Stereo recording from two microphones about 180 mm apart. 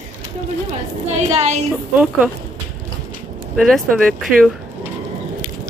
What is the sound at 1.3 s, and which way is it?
Speech, 35° right (ahead or behind).